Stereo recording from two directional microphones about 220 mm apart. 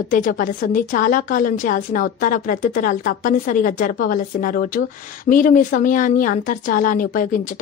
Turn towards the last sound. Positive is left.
turn(degrees=35)  # may be behind; listen again after turning